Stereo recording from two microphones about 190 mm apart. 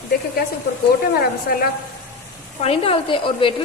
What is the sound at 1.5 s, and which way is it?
Speech, 50° left (ahead or behind).